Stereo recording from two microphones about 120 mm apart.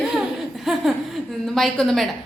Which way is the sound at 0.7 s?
Centre (ahead or behind).